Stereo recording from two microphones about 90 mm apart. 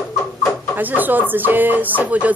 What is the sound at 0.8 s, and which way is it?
Speech, 20° right (ahead or behind).